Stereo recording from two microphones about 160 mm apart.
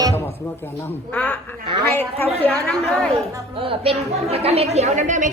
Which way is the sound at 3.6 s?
35° right (ahead or behind).